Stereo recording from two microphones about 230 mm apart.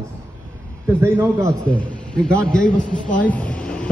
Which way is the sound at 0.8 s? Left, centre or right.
Centre.